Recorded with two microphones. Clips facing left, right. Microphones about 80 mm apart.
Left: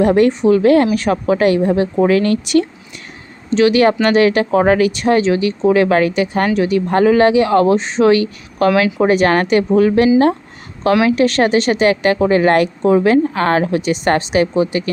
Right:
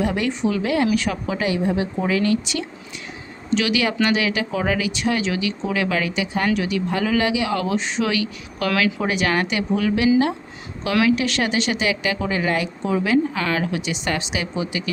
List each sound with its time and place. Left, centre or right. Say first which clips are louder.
0.0 s a woman's voice: left 10 dB; left
3.5 s a woman's voice: left 9 dB; left
6.5 s speech: left 7 dB; left
11.1 s a woman's voice: left 8 dB; left